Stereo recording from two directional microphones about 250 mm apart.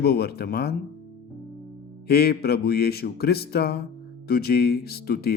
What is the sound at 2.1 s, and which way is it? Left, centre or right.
Speech, left.